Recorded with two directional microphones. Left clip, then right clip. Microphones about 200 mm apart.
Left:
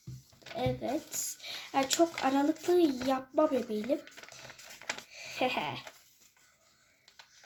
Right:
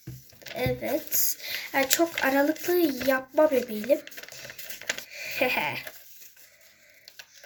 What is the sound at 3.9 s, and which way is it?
Speech, 5° right (ahead or behind).